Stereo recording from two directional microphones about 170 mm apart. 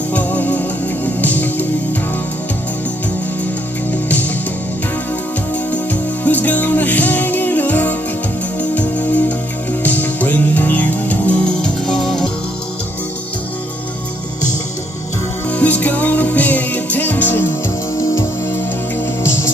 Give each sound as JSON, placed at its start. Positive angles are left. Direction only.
{"t": 0.1, "sound": "music", "side_deg": 10}
{"t": 5.7, "sound": "music", "side_deg": 10}
{"t": 15.4, "sound": "music", "side_deg": 10}